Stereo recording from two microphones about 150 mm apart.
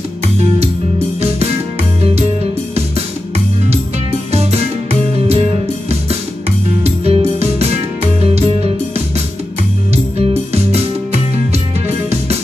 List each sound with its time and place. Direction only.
4.3 s music: 45° right (ahead or behind)
10.1 s music: 45° right (ahead or behind)